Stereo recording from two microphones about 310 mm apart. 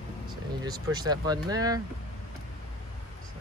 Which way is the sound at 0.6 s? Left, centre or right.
Centre.